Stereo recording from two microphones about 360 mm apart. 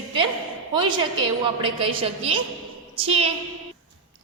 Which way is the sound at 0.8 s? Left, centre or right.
Centre.